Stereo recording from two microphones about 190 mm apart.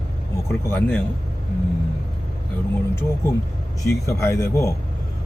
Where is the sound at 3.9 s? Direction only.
15° left (ahead or behind).